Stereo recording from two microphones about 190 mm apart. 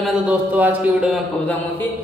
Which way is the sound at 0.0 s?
5° right (ahead or behind).